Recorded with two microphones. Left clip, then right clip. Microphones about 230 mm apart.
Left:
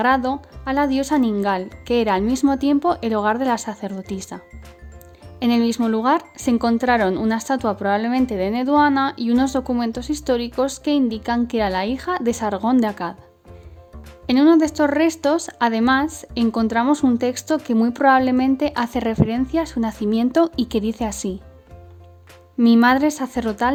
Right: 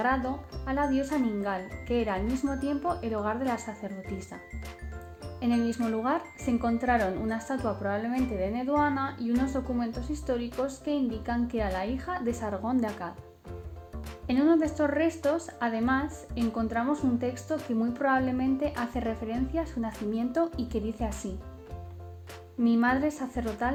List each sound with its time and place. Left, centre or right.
0.0 s a woman's voice: left
5.4 s a woman's voice: left
14.3 s a woman's voice: left
22.6 s a woman's voice: left